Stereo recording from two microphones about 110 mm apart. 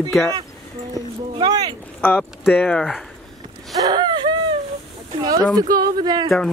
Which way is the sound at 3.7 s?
35° right (ahead or behind).